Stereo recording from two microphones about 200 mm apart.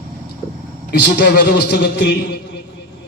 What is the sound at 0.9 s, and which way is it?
A man's voice, 55° left (ahead or behind).